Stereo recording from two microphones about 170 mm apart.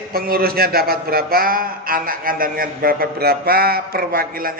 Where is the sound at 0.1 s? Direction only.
60° right (ahead or behind).